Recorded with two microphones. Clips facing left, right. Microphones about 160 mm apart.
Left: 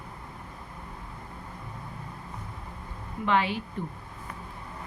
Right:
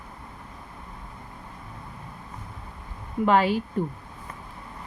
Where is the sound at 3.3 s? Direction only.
40° right (ahead or behind).